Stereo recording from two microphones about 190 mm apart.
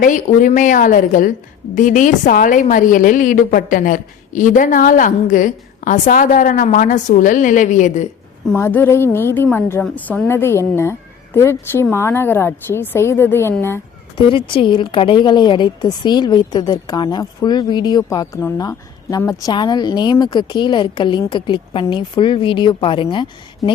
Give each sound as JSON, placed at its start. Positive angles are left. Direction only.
{"t": 0.0, "sound": "a woman's voice", "side_deg": 40}
{"t": 8.5, "sound": "a woman's voice", "side_deg": 10}
{"t": 14.3, "sound": "a woman's voice", "side_deg": 25}